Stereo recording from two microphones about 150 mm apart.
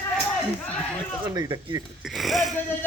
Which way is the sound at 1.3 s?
25° right (ahead or behind).